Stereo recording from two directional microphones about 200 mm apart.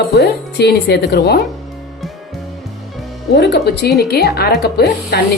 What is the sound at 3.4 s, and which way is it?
A woman's voice, 55° left (ahead or behind).